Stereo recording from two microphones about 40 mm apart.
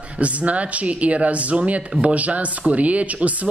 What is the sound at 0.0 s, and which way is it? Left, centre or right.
A man's voice, right.